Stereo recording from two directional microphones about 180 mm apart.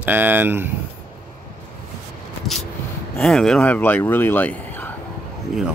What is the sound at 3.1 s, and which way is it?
Speech, centre (ahead or behind).